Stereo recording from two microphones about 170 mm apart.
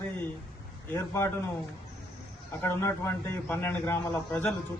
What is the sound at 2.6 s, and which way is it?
A man's voice, 15° left (ahead or behind).